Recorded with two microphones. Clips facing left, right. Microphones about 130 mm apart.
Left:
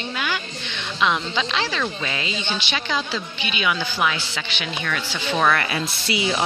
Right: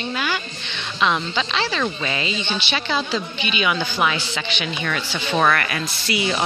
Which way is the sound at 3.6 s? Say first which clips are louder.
Right 1 dB; 5° right (ahead or behind).